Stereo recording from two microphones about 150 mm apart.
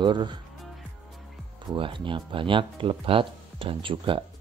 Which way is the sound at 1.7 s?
35° right (ahead or behind).